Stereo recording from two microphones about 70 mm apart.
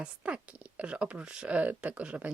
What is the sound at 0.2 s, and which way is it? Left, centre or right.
Speech, centre.